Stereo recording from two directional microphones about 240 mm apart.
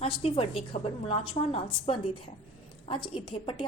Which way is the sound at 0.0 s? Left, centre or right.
Left.